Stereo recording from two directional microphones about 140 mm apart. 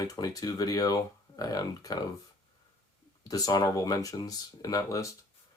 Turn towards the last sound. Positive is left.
turn(degrees=25)  # may be behind; listen again after turning